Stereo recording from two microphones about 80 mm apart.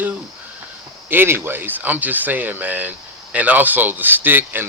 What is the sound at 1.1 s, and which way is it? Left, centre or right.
Speech, right.